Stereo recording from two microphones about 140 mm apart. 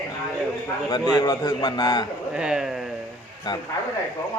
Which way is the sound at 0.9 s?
30° left (ahead or behind).